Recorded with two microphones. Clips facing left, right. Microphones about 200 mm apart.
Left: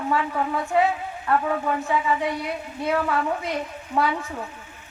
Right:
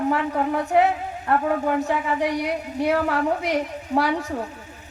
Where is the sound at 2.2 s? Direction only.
75° right (ahead or behind).